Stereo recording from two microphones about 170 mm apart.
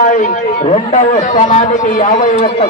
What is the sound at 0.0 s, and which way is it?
A man's voice, 50° left (ahead or behind).